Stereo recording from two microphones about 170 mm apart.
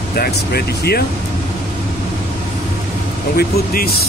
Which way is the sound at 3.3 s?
60° left (ahead or behind).